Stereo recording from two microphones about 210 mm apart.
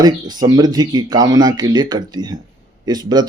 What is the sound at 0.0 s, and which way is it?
Speech, 20° right (ahead or behind).